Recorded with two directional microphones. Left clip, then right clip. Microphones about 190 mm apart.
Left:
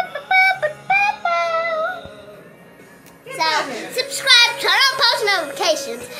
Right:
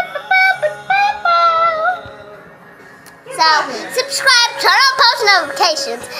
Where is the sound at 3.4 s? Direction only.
5° left (ahead or behind).